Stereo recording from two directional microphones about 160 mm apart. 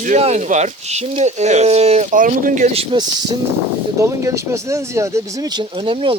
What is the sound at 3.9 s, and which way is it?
Speech, 20° right (ahead or behind).